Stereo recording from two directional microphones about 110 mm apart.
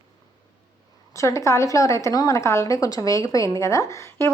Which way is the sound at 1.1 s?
30° left (ahead or behind).